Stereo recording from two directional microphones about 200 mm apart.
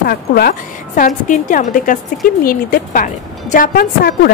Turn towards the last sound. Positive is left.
turn(degrees=45)  # may be behind; listen again after turning